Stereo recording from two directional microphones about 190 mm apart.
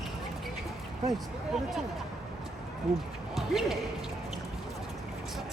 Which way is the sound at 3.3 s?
Centre (ahead or behind).